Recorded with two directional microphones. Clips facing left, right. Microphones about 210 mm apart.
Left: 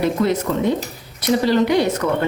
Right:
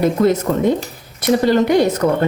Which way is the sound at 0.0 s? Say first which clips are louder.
Right 4 dB; 45° right (ahead or behind).